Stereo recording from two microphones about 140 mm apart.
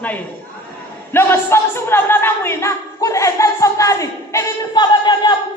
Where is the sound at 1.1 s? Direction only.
20° left (ahead or behind).